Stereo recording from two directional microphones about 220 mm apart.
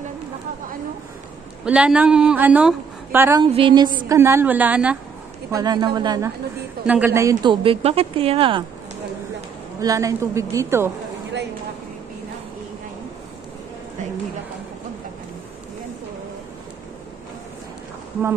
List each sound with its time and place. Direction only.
1.6 s a woman's voice: 5° right (ahead or behind)
5.5 s a woman's voice: 15° right (ahead or behind)
9.8 s a woman's voice: 15° right (ahead or behind)